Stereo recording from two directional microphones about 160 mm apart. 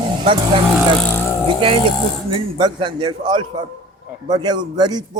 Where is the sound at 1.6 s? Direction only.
35° right (ahead or behind).